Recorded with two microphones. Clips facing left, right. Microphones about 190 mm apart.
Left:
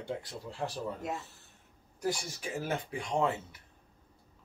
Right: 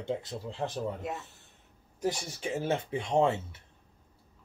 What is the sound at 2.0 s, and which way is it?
Speech, 25° right (ahead or behind).